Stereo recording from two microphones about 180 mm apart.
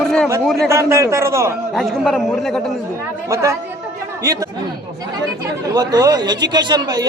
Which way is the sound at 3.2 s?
15° right (ahead or behind).